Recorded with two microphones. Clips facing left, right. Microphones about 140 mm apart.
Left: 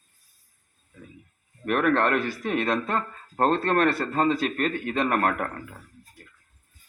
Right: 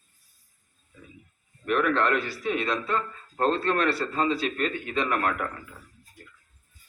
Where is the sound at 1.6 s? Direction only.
50° left (ahead or behind).